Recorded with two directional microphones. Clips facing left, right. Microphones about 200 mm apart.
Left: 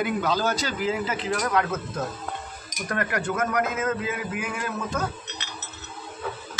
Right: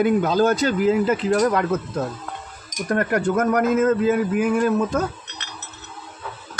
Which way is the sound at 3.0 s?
45° right (ahead or behind).